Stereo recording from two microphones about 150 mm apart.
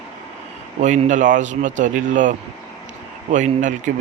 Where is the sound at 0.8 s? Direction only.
55° right (ahead or behind).